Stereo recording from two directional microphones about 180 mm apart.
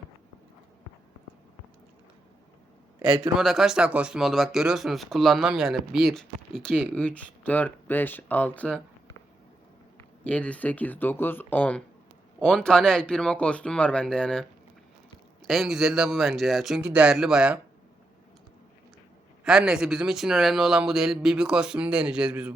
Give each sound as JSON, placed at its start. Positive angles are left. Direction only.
{"t": 3.0, "sound": "speech", "side_deg": -5}
{"t": 10.2, "sound": "speech", "side_deg": 5}
{"t": 19.5, "sound": "speech", "side_deg": -5}